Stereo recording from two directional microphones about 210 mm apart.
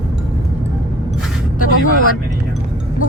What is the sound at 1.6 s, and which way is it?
Vehicle, 90° left.